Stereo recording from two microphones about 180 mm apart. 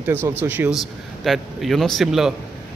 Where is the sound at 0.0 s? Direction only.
10° right (ahead or behind).